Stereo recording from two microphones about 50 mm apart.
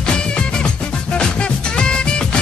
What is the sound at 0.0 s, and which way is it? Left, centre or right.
Music, centre.